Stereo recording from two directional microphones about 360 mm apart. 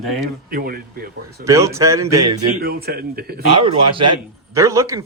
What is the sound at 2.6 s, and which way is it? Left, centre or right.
Speech, right.